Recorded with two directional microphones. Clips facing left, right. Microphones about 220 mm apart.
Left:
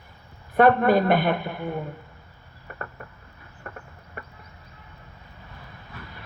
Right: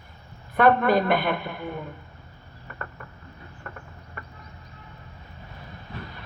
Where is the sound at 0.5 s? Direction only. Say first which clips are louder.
Left 2 dB; 40° left (ahead or behind).